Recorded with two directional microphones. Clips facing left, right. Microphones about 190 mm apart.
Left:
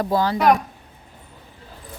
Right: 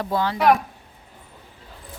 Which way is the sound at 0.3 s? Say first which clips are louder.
Even; 5° right (ahead or behind).